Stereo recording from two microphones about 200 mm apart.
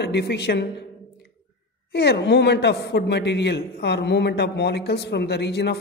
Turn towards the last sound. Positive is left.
turn(degrees=55)  # may be behind; listen again after turning